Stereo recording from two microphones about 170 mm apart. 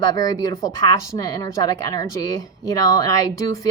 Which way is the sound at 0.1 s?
20° left (ahead or behind).